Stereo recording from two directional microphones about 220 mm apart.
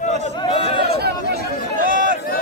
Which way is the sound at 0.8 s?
45° right (ahead or behind).